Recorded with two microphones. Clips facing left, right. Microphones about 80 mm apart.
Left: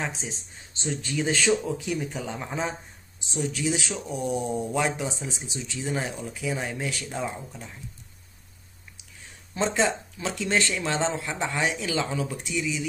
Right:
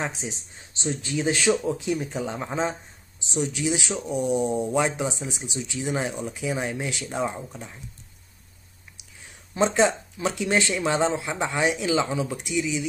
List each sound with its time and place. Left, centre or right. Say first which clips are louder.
0.8 s speech: right 2 dB; centre
3.3 s speech: right 2 dB; centre
9.5 s speech: right 4 dB; right